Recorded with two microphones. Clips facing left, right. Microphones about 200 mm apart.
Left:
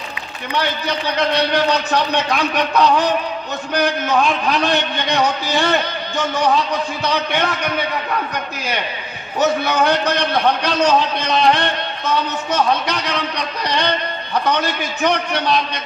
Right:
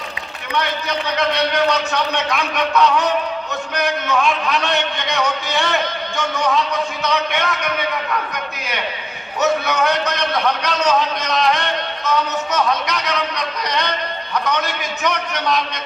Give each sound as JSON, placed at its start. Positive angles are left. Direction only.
{"t": 0.5, "sound": "a man's voice", "side_deg": 35}
{"t": 9.4, "sound": "a man's voice", "side_deg": 30}